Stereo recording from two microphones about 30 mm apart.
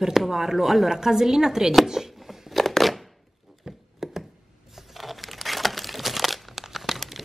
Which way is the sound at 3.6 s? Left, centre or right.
Centre.